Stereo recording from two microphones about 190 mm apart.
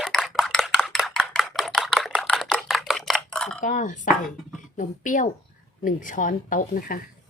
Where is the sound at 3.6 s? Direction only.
40° left (ahead or behind).